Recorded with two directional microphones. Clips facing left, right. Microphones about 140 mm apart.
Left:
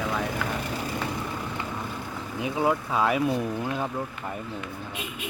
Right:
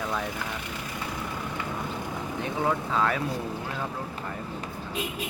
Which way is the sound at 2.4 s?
10° left (ahead or behind).